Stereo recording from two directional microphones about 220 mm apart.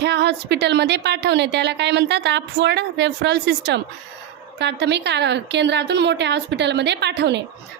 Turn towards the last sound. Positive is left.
turn(degrees=-50)  # may be behind; listen again after turning